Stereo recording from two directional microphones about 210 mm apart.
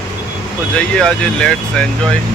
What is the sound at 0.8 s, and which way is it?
Speech, 5° left (ahead or behind).